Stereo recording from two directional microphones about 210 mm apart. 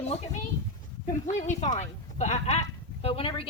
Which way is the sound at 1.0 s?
35° left (ahead or behind).